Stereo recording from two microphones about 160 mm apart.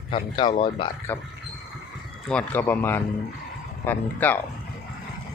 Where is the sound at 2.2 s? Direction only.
10° left (ahead or behind).